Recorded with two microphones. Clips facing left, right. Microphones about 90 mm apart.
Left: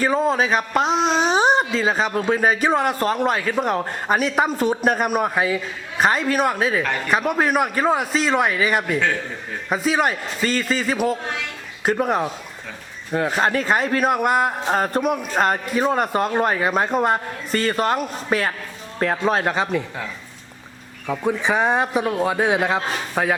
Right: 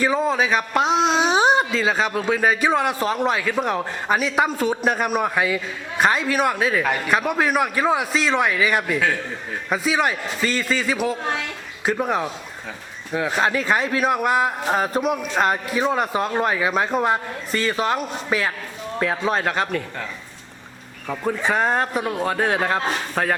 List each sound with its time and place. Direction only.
0.0 s a man's voice: centre (ahead or behind)
10.1 s a man's voice: 40° left (ahead or behind)
10.9 s a man's voice: centre (ahead or behind)
21.4 s a man's voice: 15° left (ahead or behind)